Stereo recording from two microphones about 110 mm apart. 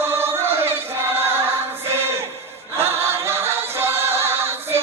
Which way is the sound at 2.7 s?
20° right (ahead or behind).